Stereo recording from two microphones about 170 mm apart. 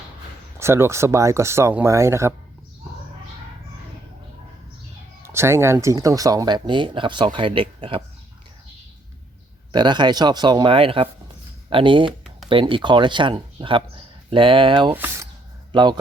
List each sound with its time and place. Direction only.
0.6 s speech: 15° right (ahead or behind)
5.2 s speech: 15° right (ahead or behind); by 8.0 s 30° right (ahead or behind)
9.7 s speech: 25° right (ahead or behind)
14.9 s a sound: 15° right (ahead or behind)
15.7 s speech: 25° right (ahead or behind)